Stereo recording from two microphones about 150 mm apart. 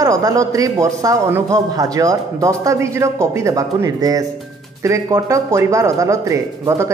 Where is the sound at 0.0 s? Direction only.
25° right (ahead or behind).